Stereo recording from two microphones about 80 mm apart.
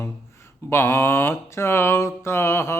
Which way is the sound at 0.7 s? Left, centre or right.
Left.